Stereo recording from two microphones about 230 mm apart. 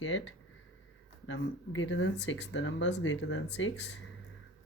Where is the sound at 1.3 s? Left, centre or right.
Left.